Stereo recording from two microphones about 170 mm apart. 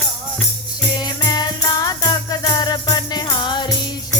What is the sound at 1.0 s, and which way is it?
Music, 25° left (ahead or behind).